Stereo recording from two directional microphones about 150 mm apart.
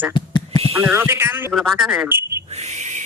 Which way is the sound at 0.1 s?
30° left (ahead or behind).